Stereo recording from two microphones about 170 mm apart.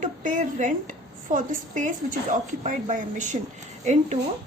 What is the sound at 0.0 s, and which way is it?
A woman's voice, 45° right (ahead or behind).